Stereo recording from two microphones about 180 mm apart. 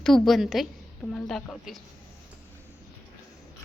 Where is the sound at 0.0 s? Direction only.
Centre (ahead or behind).